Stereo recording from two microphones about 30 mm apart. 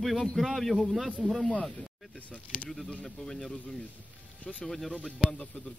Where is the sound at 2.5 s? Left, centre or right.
Left.